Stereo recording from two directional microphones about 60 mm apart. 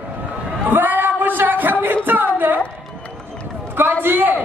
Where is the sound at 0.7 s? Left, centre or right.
Right.